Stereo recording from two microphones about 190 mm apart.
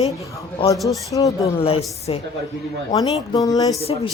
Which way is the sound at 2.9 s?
20° left (ahead or behind).